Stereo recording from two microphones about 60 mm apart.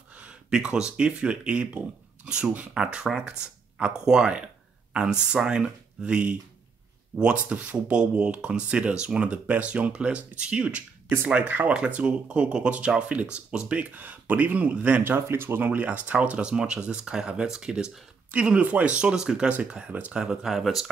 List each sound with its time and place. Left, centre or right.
0.2 s speech: centre
15.1 s speech: right
20.2 s speech: centre